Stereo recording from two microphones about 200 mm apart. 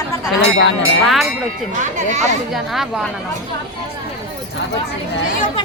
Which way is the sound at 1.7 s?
40° right (ahead or behind).